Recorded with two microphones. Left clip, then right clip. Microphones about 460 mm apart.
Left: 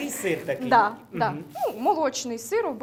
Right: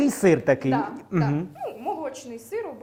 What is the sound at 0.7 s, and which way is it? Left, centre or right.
A woman's voice, left.